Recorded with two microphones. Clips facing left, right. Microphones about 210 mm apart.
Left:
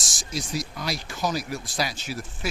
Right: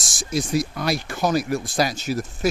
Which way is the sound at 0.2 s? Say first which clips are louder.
Right 8 dB; 55° right (ahead or behind).